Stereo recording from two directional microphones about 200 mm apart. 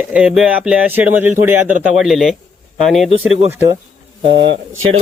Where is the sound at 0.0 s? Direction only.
5° right (ahead or behind).